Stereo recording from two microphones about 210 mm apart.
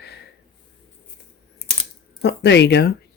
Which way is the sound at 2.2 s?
55° left (ahead or behind).